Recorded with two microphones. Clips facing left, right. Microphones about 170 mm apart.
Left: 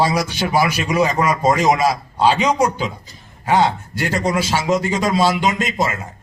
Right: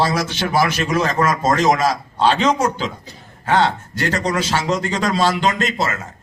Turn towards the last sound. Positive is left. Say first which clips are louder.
# left 1 dB
turn(degrees=10)  # may be behind; listen again after turning